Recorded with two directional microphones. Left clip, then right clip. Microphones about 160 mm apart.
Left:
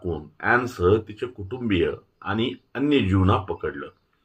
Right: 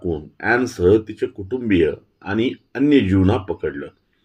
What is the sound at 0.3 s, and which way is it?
Speech, 30° right (ahead or behind).